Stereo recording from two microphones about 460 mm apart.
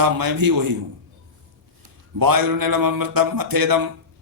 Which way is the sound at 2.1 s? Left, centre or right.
Right.